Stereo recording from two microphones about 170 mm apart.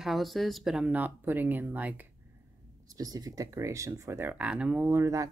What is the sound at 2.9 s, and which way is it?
Speech, 20° right (ahead or behind).